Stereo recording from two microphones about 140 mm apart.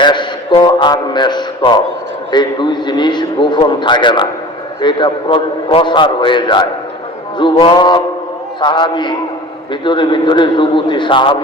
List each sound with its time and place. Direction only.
0.0 s a man's voice: 35° left (ahead or behind)